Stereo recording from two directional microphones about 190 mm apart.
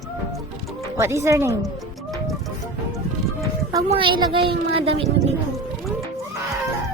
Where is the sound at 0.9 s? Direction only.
15° right (ahead or behind).